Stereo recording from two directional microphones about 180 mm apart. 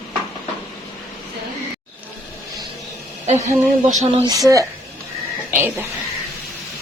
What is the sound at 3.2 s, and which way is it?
Speech, 40° right (ahead or behind).